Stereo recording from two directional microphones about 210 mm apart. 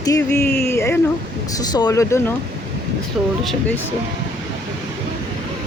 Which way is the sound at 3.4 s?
Centre (ahead or behind).